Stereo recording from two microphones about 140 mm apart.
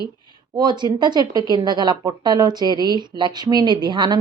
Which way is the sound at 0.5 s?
30° right (ahead or behind).